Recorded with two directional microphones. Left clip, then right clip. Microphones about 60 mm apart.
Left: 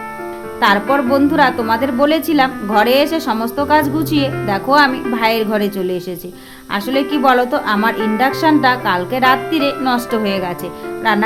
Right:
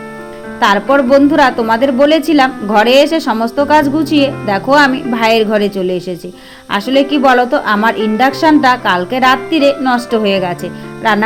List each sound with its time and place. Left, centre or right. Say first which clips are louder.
0.6 s speech: right 3 dB; right